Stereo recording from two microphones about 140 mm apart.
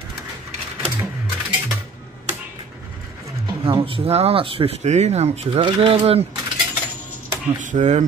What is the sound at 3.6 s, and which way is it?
Speech, 40° right (ahead or behind).